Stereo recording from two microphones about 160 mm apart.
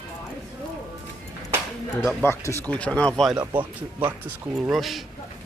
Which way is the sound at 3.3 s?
30° right (ahead or behind).